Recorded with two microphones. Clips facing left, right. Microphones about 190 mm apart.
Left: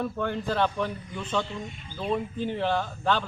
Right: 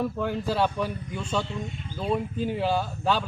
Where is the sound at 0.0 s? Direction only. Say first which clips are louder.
Right 2 dB; 10° right (ahead or behind).